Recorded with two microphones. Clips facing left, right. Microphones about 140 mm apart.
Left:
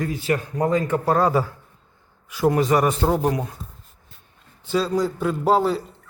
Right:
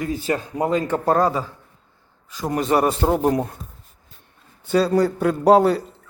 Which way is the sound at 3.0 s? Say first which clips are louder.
Right 2 dB; 10° right (ahead or behind).